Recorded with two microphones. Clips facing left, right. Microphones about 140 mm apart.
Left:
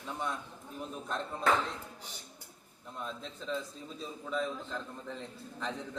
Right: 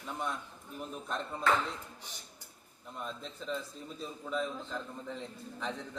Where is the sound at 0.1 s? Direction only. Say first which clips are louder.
Even; centre (ahead or behind).